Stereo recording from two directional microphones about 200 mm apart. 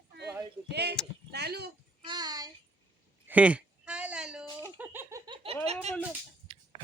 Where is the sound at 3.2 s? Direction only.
5° right (ahead or behind).